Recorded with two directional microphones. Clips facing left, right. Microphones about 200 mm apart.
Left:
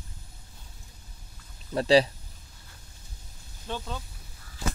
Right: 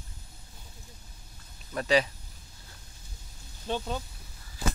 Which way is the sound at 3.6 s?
20° right (ahead or behind).